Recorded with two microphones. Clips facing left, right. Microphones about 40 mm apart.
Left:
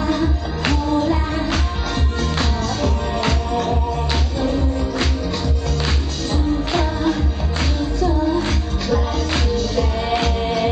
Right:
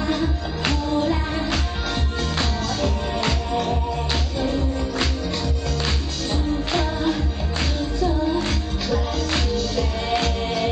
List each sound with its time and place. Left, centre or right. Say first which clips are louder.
0.0 s music: left 3 dB; centre
4.4 s music: left 3 dB; centre
6.3 s music: left 3 dB; centre